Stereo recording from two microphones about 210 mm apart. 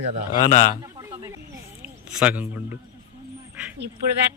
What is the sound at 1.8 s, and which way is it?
Speech, 5° right (ahead or behind).